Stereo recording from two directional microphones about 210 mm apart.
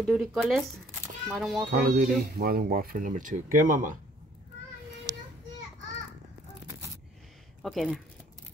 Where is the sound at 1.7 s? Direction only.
40° right (ahead or behind).